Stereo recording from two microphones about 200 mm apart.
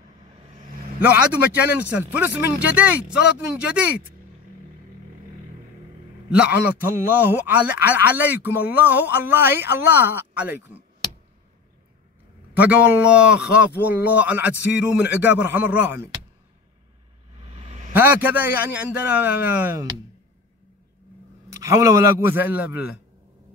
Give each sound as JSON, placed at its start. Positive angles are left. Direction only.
{"t": 1.6, "sound": "speech", "side_deg": -10}
{"t": 6.3, "sound": "speech", "side_deg": -5}
{"t": 12.5, "sound": "speech", "side_deg": -5}
{"t": 17.4, "sound": "a sound", "side_deg": -30}
{"t": 17.9, "sound": "speech", "side_deg": -10}
{"t": 21.5, "sound": "speech", "side_deg": -15}